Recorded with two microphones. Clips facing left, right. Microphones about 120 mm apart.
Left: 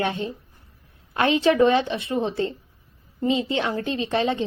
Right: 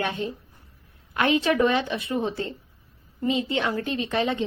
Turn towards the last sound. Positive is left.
turn(degrees=30)  # may be behind; listen again after turning